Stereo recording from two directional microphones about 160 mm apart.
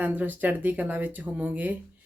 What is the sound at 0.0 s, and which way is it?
Speech, 10° right (ahead or behind).